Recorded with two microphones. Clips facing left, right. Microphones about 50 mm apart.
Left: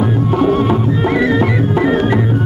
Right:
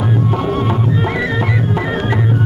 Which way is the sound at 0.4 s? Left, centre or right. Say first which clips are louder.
Left 5 dB; centre.